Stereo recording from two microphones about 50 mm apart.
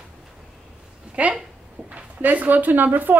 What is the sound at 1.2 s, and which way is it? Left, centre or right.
Speech, right.